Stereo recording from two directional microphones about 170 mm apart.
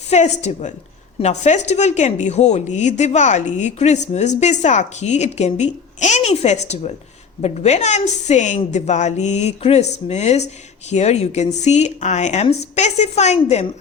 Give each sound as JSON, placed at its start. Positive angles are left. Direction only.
{"t": 0.1, "sound": "a woman's voice", "side_deg": 40}